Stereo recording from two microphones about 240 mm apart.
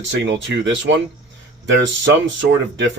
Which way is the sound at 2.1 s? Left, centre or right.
Right.